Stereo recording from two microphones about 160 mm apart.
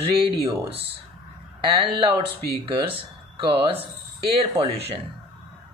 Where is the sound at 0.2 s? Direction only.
35° right (ahead or behind).